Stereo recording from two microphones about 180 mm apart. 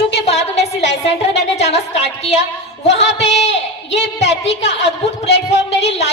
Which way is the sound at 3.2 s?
40° left (ahead or behind).